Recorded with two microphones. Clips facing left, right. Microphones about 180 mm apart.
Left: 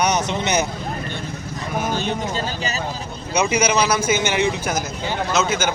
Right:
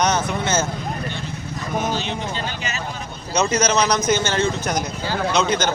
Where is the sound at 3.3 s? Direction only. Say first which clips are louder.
Even; 10° left (ahead or behind).